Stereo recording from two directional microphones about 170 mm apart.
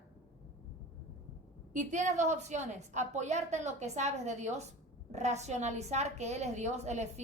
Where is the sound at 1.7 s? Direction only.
45° right (ahead or behind).